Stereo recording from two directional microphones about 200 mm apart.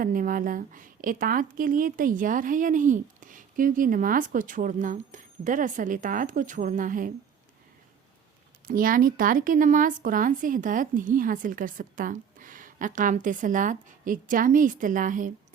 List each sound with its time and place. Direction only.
0.0 s a woman's voice: 45° right (ahead or behind)
8.6 s a woman's voice: 45° right (ahead or behind)